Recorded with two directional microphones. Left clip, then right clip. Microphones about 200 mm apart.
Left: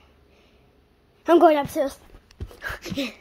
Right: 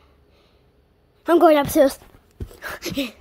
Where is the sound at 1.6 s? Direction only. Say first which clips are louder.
Right 9 dB; 45° right (ahead or behind).